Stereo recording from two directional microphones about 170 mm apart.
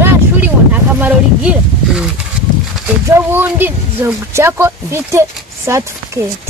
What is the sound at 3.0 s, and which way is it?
Speech, 15° right (ahead or behind).